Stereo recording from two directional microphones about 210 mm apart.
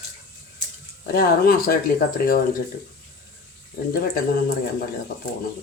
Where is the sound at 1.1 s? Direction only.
45° left (ahead or behind).